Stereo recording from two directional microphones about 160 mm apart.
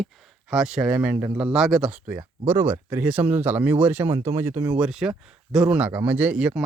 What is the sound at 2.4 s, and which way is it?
Speech, 15° right (ahead or behind).